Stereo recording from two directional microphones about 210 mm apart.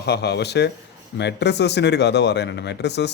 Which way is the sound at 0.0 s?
50° left (ahead or behind).